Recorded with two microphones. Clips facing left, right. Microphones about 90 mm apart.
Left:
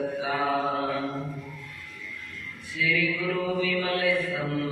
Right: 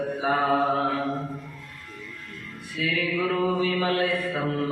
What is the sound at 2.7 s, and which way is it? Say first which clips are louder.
Mantra: even; 50° right (ahead or behind).